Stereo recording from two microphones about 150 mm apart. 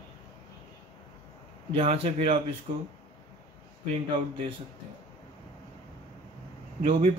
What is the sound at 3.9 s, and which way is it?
Speech, 45° right (ahead or behind).